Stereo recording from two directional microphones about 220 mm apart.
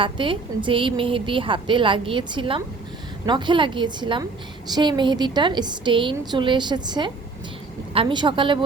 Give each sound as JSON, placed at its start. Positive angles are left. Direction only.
{"t": 0.0, "sound": "a woman's voice", "side_deg": -20}